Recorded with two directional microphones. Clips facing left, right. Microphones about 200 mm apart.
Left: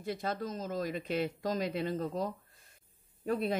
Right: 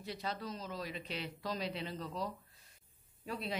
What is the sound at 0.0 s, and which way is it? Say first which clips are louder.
Speech: left 6 dB; 50° left (ahead or behind).